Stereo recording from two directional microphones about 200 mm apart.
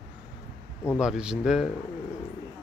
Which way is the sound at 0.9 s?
5° right (ahead or behind).